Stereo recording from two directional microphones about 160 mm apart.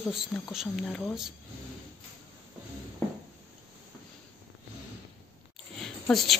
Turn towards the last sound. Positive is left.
turn(degrees=0)  # may be behind; listen again after turning